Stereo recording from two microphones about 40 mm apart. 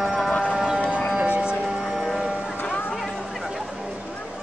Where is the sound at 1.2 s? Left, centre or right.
Right.